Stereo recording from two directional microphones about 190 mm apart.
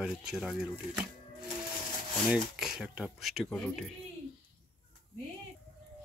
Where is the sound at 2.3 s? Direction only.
5° right (ahead or behind).